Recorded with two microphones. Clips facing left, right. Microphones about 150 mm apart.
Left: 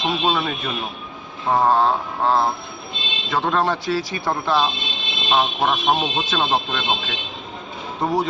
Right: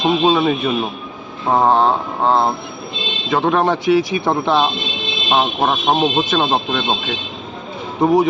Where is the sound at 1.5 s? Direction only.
20° right (ahead or behind).